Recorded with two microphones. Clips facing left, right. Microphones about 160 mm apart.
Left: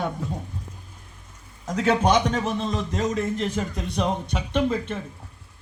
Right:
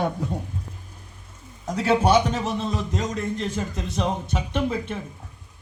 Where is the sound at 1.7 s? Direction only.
10° right (ahead or behind).